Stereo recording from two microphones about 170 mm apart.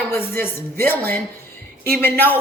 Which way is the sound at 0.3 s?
15° left (ahead or behind).